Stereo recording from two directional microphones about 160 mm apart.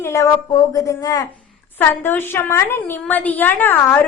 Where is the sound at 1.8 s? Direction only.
10° left (ahead or behind).